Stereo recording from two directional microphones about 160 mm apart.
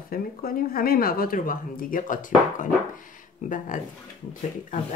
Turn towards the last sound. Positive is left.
turn(degrees=50)  # may be behind; listen again after turning